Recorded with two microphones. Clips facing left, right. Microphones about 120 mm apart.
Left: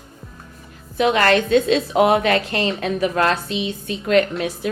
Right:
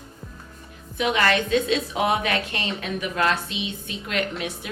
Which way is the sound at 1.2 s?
40° left (ahead or behind).